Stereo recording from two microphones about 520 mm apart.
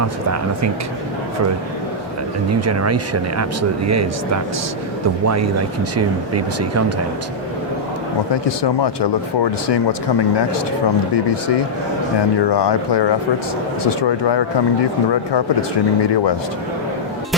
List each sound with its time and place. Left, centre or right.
2.5 s speech: right
5.2 s speech: right
8.3 s speech: left
11.1 s speech: left